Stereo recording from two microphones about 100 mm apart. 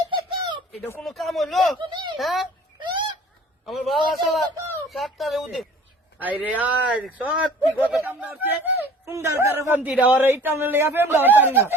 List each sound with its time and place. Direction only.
0.1 s a sound: 50° right (ahead or behind)
1.0 s speech: centre (ahead or behind)
1.8 s a child's voice: 55° right (ahead or behind)
2.1 s speech: centre (ahead or behind)
2.8 s a sound: 50° right (ahead or behind)
3.7 s speech: centre (ahead or behind)
6.1 s a man's voice: 15° right (ahead or behind)
9.8 s a man's voice: 15° right (ahead or behind)